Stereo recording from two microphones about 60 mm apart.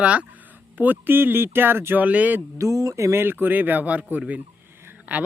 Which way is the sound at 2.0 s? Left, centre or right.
Right.